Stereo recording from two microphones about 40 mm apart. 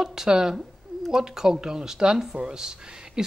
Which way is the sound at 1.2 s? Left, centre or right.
Centre.